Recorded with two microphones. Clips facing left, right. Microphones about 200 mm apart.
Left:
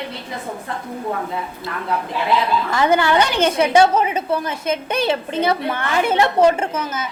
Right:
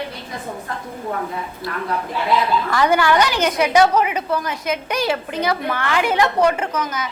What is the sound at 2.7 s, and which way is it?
A woman's voice, 20° left (ahead or behind).